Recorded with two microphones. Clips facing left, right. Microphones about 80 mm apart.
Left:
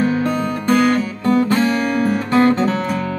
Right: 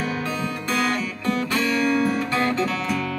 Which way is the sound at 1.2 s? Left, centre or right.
Left.